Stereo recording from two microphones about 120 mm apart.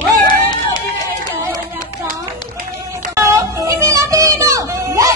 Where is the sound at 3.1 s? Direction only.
25° right (ahead or behind).